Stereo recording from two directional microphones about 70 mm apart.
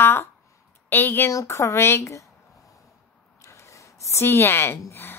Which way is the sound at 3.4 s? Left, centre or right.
Left.